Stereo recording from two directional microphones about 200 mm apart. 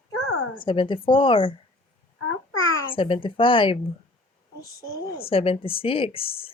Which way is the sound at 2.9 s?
25° left (ahead or behind).